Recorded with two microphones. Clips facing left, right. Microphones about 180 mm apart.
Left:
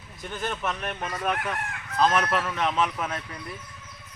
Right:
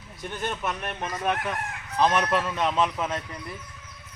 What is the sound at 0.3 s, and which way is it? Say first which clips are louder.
A man's voice: even; 15° right (ahead or behind).